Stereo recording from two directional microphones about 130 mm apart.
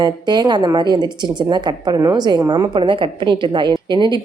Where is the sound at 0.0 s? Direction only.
35° right (ahead or behind).